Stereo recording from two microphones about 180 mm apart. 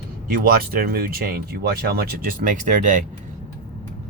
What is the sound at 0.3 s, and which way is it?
Speech, 55° right (ahead or behind).